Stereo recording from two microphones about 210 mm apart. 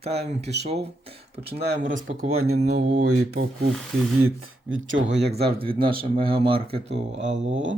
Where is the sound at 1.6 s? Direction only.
60° right (ahead or behind).